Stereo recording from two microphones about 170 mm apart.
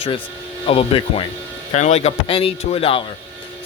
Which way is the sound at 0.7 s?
35° left (ahead or behind).